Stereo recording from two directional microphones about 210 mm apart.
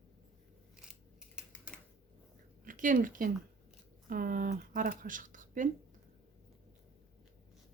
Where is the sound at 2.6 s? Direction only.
40° right (ahead or behind).